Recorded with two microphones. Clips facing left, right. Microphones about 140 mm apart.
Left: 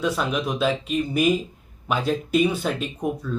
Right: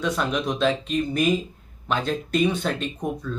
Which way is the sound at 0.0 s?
5° left (ahead or behind).